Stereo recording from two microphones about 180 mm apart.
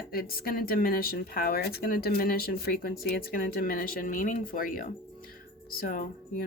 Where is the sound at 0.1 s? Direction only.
55° left (ahead or behind).